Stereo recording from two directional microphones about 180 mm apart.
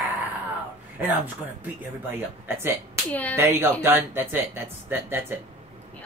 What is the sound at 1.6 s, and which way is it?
Speech, 10° right (ahead or behind).